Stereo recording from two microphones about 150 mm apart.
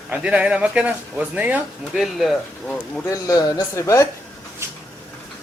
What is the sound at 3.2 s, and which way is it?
Speech, 25° left (ahead or behind).